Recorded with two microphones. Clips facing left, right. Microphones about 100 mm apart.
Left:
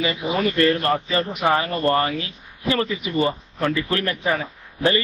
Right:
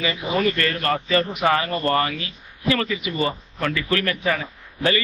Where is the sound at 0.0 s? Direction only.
20° left (ahead or behind).